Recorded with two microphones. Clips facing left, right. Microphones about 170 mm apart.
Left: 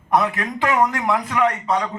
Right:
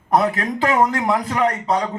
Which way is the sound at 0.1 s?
40° right (ahead or behind).